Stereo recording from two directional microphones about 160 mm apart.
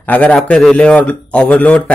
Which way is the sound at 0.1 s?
10° left (ahead or behind).